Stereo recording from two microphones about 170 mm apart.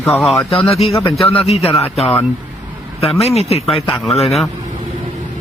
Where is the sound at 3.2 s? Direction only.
35° left (ahead or behind).